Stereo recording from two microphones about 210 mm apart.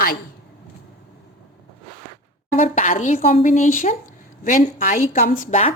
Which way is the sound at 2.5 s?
35° left (ahead or behind).